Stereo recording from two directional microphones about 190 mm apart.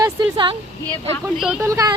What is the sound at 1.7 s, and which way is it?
Speech, 20° right (ahead or behind).